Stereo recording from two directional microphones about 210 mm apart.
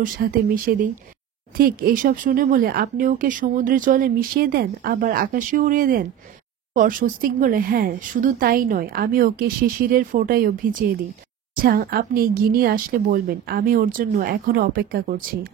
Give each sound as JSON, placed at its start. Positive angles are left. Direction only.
{"t": 0.0, "sound": "speech", "side_deg": -40}